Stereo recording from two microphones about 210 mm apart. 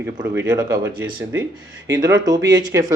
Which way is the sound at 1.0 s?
15° right (ahead or behind).